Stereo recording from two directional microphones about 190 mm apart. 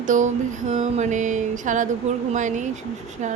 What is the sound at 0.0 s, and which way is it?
Speech, 40° right (ahead or behind).